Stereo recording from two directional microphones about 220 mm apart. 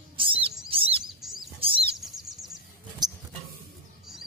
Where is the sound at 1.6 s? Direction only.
25° right (ahead or behind).